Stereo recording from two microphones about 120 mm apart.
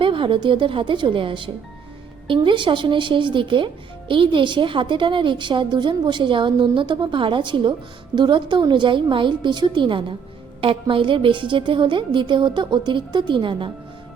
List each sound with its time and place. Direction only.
0.0 s a woman's voice: 45° right (ahead or behind)